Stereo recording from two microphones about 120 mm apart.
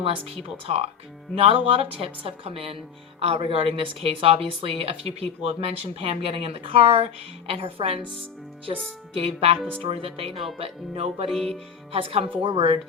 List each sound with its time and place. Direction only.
0.7 s a woman's voice: 55° right (ahead or behind)
9.1 s a woman's voice: 55° right (ahead or behind)
11.3 s music: centre (ahead or behind)
11.9 s a woman's voice: 50° right (ahead or behind)